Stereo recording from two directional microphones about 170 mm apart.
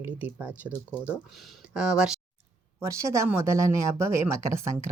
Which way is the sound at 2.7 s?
15° right (ahead or behind).